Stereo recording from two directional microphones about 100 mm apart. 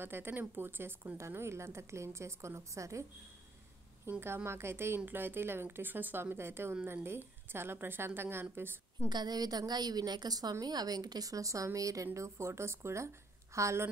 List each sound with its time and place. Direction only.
0.0 s a woman's voice: 20° right (ahead or behind)
4.1 s a woman's voice: 20° right (ahead or behind)
9.1 s a woman's voice: 40° right (ahead or behind)